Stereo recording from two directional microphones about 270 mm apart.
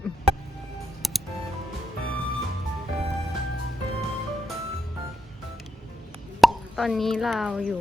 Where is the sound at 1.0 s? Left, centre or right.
Centre.